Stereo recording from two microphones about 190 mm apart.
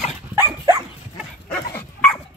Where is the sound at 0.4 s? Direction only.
15° right (ahead or behind).